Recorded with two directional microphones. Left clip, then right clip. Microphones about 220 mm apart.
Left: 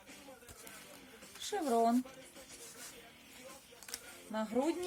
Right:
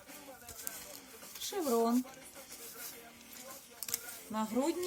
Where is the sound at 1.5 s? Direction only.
20° left (ahead or behind).